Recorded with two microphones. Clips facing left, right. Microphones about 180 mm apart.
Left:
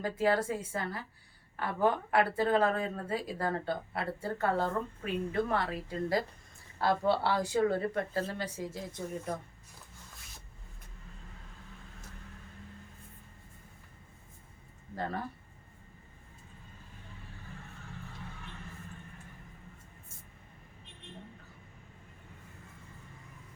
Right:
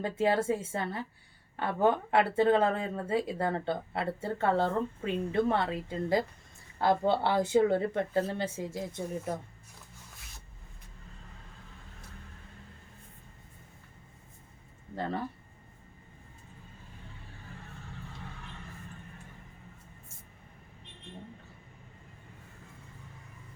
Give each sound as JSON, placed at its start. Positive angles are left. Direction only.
{"t": 0.0, "sound": "speech", "side_deg": -25}